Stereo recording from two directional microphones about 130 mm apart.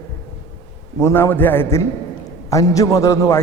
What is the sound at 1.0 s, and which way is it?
A man's voice, 20° left (ahead or behind).